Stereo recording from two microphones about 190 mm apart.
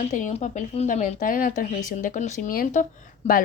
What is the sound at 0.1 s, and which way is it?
Speech, 40° left (ahead or behind).